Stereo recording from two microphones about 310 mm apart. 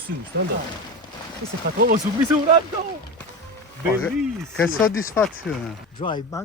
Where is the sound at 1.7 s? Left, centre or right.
Right.